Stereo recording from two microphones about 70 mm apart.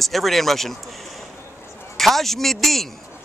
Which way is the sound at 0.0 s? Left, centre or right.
Centre.